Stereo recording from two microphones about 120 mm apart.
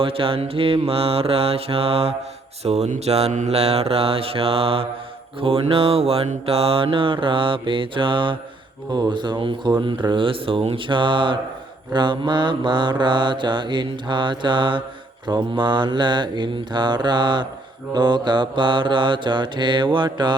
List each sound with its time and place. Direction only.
0.0 s mantra: 50° right (ahead or behind)